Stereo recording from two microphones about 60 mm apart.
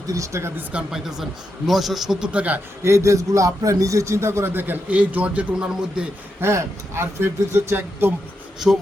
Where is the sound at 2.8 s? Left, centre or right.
Right.